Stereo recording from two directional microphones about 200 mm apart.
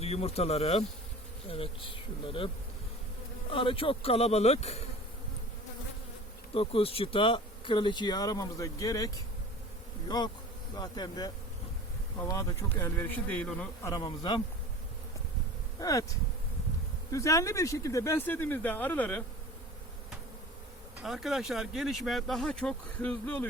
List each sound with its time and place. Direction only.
0.0 s insect: 30° left (ahead or behind)
1.5 s speech: 30° left (ahead or behind)
3.5 s insect: 25° left (ahead or behind)
6.5 s speech: 30° left (ahead or behind)
10.8 s speech: 20° left (ahead or behind)
13.9 s speech: 20° left (ahead or behind)
15.8 s speech: 15° left (ahead or behind)
21.0 s speech: centre (ahead or behind)